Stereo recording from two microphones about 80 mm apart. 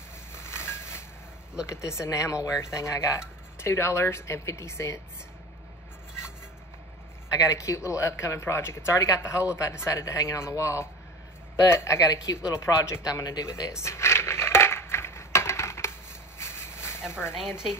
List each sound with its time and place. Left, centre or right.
0.3 s a sound: left
1.7 s speech: left
7.3 s speech: left
13.7 s coin: left